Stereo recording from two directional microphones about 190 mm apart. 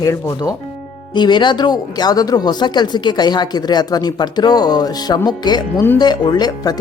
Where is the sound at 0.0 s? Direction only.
20° left (ahead or behind).